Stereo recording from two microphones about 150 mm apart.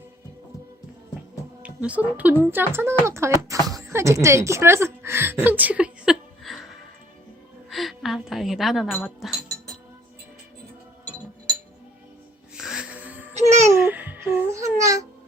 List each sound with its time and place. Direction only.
1.6 s speech: 10° right (ahead or behind)
7.7 s a sound: centre (ahead or behind)
8.9 s speech: 10° left (ahead or behind)
12.5 s music: 5° right (ahead or behind)
13.7 s babbling: 15° right (ahead or behind)